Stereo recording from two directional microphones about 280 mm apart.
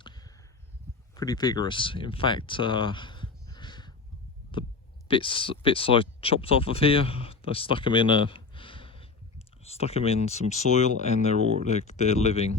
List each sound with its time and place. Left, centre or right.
0.0 s a sound: centre
1.1 s speech: centre
5.0 s speech: centre